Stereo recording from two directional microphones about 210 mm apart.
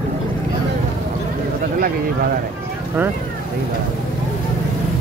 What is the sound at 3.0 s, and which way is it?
Speech, 10° right (ahead or behind).